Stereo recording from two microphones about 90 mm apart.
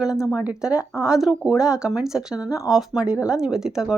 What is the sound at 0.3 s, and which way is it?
Speech, 10° right (ahead or behind).